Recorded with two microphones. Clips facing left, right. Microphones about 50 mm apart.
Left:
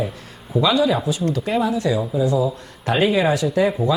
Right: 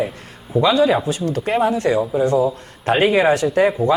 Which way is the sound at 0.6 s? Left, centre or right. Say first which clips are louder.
Right 3 dB; right.